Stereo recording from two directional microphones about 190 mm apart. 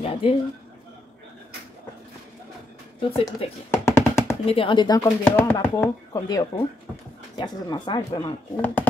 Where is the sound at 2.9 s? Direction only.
30° left (ahead or behind).